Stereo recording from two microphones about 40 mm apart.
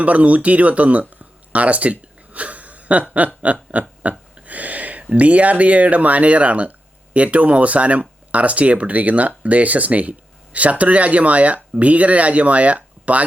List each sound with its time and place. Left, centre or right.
0.0 s speech: right